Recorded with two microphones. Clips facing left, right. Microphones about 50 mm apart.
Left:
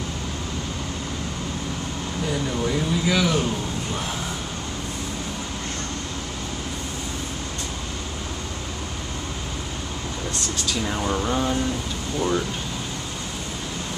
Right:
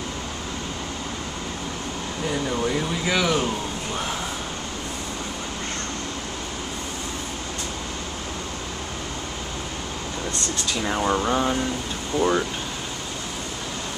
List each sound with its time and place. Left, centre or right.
2.5 s speech: centre
10.7 s speech: centre